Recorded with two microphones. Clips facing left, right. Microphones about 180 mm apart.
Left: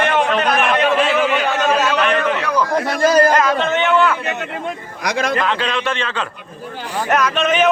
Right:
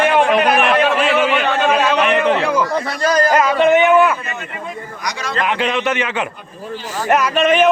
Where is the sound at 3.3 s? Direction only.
10° right (ahead or behind).